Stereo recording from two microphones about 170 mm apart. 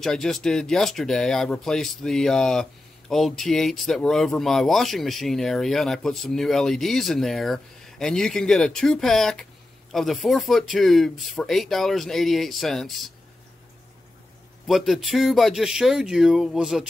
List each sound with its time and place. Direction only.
0.0 s speech: centre (ahead or behind)
14.7 s speech: centre (ahead or behind)